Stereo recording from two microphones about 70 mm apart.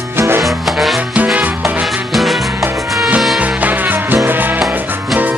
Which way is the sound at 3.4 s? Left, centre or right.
Right.